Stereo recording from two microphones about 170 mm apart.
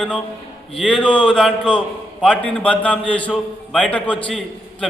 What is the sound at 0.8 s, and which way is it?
A man's voice, 5° left (ahead or behind).